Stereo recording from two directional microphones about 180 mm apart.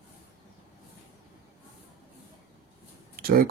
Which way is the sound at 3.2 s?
55° right (ahead or behind).